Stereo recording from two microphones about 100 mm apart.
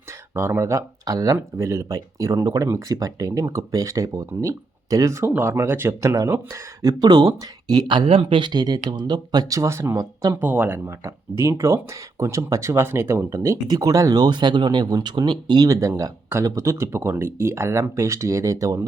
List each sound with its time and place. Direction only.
0.3 s speech: 25° right (ahead or behind)
7.0 s speech: 45° right (ahead or behind); by 18.9 s 30° right (ahead or behind)